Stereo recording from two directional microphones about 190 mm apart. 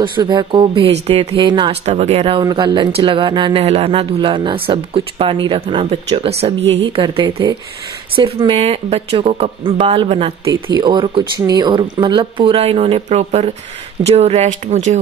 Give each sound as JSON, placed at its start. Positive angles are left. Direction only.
{"t": 0.0, "sound": "speech", "side_deg": -25}
{"t": 1.9, "sound": "speech", "side_deg": -35}